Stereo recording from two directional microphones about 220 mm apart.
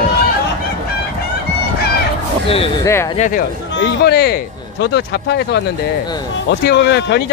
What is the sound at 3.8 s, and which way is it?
Speech, 50° left (ahead or behind).